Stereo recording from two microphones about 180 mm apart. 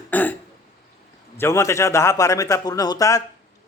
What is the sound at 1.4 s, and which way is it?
A man's voice, 15° left (ahead or behind).